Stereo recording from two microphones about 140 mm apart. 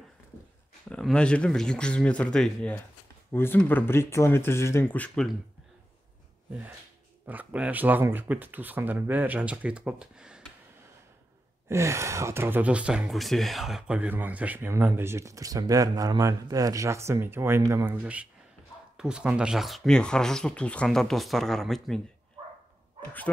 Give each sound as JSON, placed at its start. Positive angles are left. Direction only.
{"t": 0.8, "sound": "speech", "side_deg": 5}
{"t": 7.2, "sound": "speech", "side_deg": -10}
{"t": 11.7, "sound": "speech", "side_deg": -20}
{"t": 18.0, "sound": "speech", "side_deg": -10}
{"t": 23.3, "sound": "speech", "side_deg": 10}